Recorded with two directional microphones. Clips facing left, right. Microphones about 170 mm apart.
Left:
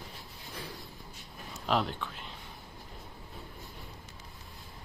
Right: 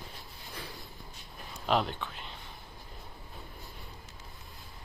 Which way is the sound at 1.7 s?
Centre (ahead or behind).